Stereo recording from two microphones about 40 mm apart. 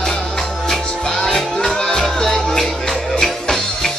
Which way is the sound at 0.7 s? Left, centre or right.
Centre.